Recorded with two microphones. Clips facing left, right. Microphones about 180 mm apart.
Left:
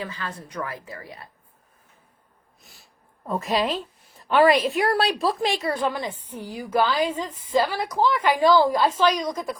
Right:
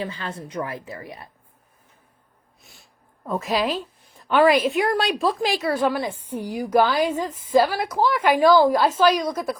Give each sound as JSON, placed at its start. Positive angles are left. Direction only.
{"t": 0.0, "sound": "a woman's voice", "side_deg": -25}
{"t": 2.6, "sound": "snort", "side_deg": 0}
{"t": 3.2, "sound": "a woman's voice", "side_deg": 0}